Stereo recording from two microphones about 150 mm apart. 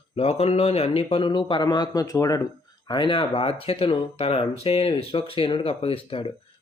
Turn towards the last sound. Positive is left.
turn(degrees=35)  # may be behind; listen again after turning